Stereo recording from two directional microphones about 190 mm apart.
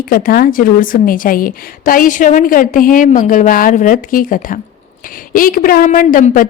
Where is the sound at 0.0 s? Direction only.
50° left (ahead or behind).